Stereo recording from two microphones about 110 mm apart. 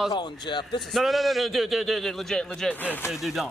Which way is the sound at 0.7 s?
Centre (ahead or behind).